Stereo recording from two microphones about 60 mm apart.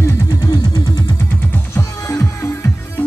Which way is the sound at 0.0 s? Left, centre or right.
Left.